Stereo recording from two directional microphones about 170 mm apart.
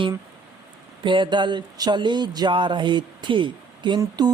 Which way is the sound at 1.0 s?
30° right (ahead or behind).